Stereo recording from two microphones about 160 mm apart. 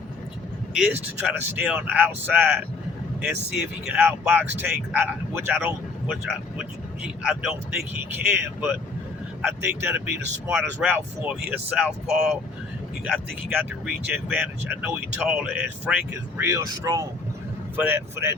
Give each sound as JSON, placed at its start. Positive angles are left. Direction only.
{"t": 1.3, "sound": "speech", "side_deg": -10}